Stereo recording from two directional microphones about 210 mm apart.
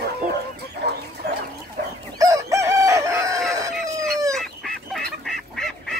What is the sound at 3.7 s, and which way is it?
Chicken, centre (ahead or behind).